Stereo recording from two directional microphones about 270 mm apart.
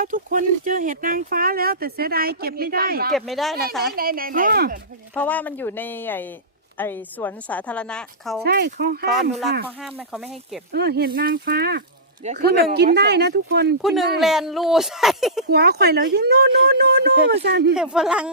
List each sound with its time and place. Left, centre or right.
0.0 s speech: right
3.1 s a woman's voice: centre
3.9 s speech: right
5.1 s a woman's voice: centre
8.4 s speech: right
9.6 s a woman's voice: centre
10.7 s speech: right
13.8 s a woman's voice: centre
15.4 s speech: right
17.7 s a woman's voice: centre